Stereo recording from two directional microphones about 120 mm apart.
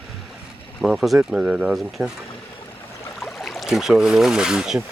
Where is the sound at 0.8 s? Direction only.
Centre (ahead or behind).